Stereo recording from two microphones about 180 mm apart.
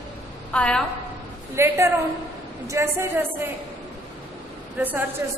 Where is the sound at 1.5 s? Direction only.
15° right (ahead or behind).